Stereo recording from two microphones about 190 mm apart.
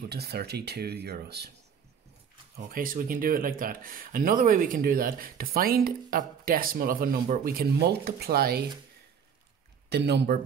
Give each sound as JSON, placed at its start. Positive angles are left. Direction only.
{"t": 0.1, "sound": "speech", "side_deg": -55}
{"t": 2.5, "sound": "speech", "side_deg": -50}
{"t": 9.8, "sound": "speech", "side_deg": -60}